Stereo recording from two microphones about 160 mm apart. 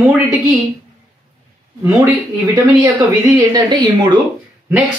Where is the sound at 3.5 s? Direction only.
25° right (ahead or behind).